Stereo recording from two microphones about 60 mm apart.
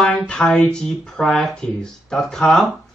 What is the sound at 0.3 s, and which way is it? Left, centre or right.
Speech, centre.